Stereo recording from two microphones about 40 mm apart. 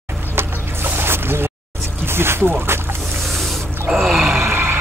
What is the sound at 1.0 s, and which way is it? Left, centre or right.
Boat, right.